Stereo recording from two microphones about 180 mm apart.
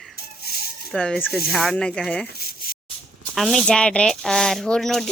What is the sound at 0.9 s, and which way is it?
Speech, 5° left (ahead or behind).